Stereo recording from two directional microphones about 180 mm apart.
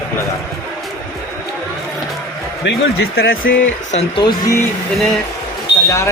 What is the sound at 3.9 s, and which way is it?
Speech, 35° left (ahead or behind).